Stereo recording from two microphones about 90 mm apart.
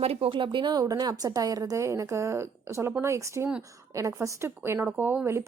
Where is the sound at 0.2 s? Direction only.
70° right (ahead or behind).